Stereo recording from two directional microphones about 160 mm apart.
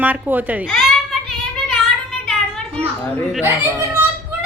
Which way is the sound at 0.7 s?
5° left (ahead or behind).